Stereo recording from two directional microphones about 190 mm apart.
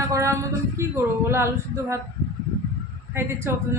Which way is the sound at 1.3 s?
15° right (ahead or behind).